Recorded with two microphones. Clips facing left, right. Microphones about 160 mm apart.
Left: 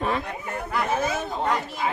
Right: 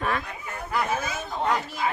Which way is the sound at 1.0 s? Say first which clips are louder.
Left 6 dB; 60° left (ahead or behind).